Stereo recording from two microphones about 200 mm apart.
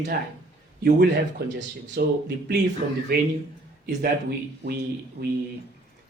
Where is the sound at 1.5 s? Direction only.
55° right (ahead or behind).